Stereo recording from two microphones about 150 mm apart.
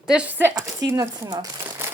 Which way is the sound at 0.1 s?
10° right (ahead or behind).